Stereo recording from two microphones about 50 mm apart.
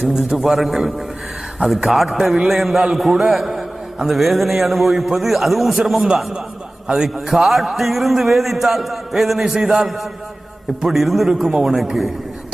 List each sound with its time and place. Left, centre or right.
0.1 s a man's voice: centre
7.3 s a man's voice: centre